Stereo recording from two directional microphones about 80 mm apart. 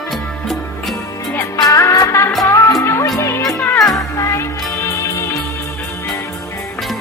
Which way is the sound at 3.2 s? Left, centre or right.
Left.